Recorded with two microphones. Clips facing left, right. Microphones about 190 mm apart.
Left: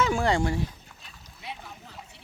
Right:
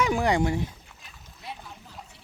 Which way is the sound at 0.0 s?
15° right (ahead or behind).